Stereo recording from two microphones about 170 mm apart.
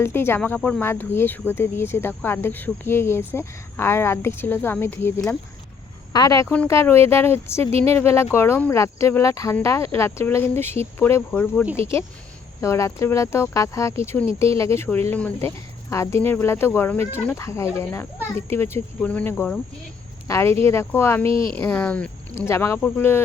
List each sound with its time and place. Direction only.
0.0 s speech: 15° left (ahead or behind)